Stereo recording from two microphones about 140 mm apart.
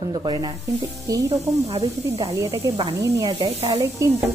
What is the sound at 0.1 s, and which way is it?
Speech, 25° right (ahead or behind).